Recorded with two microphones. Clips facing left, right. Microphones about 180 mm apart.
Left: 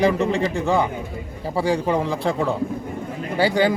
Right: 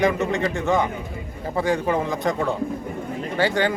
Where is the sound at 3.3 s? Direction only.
10° left (ahead or behind).